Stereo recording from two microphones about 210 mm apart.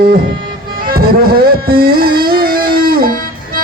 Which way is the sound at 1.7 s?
45° right (ahead or behind).